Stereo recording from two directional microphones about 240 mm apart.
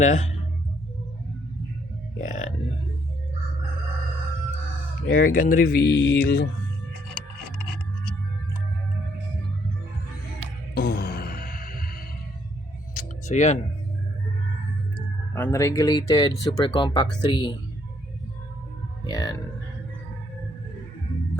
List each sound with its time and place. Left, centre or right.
0.0 s speech: left
2.2 s music: left
5.0 s speech: left
10.8 s music: left
12.9 s a sound: left
15.4 s speech: centre
19.0 s speech: centre